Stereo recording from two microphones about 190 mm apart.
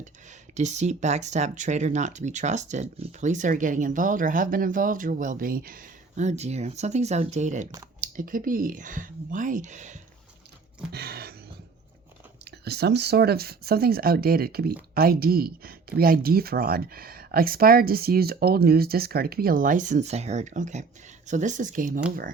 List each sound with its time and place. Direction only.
0.0 s speech: 40° right (ahead or behind)
10.9 s a sound: 55° right (ahead or behind)
12.5 s speech: 60° right (ahead or behind)